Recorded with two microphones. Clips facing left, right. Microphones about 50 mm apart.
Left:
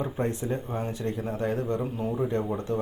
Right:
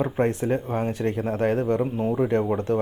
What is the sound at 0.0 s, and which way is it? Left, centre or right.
Speech, right.